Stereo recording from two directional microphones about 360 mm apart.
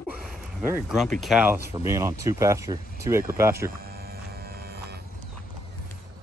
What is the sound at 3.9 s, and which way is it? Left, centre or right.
Music, right.